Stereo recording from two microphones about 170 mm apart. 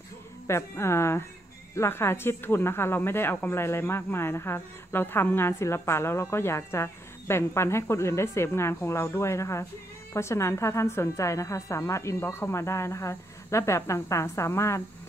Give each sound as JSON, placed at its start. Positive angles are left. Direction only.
{"t": 0.5, "sound": "speech", "side_deg": 15}